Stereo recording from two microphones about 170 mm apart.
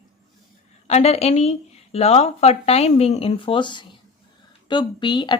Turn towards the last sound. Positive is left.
turn(degrees=25)  # may be behind; listen again after turning